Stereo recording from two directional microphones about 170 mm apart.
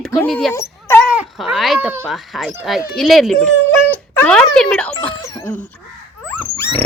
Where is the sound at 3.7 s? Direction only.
10° left (ahead or behind).